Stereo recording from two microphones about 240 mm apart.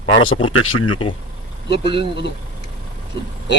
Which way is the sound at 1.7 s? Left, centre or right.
Left.